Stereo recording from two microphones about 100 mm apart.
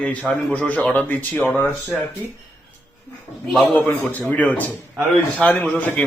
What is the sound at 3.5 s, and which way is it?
Speech, centre (ahead or behind).